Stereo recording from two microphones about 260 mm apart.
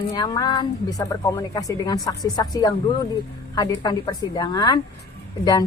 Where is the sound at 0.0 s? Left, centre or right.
Centre.